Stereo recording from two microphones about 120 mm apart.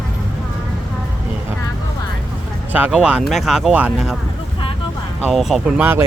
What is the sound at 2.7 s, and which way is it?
Speech, 10° right (ahead or behind).